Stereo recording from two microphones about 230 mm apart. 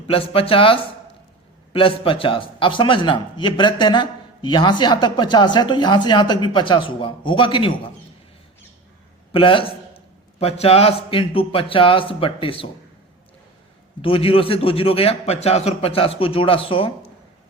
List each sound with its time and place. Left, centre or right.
0.1 s a man's voice: left
9.3 s a man's voice: left
14.0 s a man's voice: left